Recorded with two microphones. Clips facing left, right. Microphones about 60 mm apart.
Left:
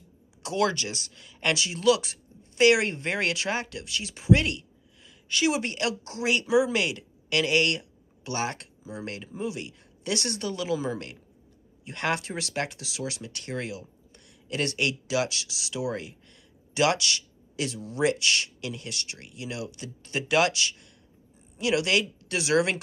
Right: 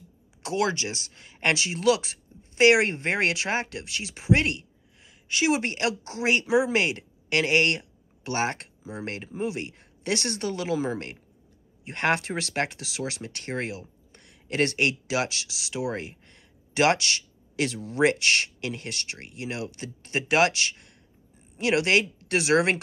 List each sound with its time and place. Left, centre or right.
0.6 s speech: right
17.6 s speech: right